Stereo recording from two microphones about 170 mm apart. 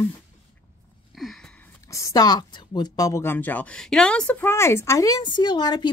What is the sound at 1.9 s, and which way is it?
A woman's voice, 20° left (ahead or behind).